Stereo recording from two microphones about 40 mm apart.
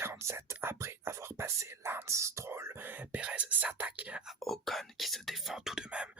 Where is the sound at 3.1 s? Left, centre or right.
Right.